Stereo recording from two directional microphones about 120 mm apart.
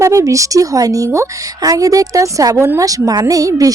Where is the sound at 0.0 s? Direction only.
25° right (ahead or behind).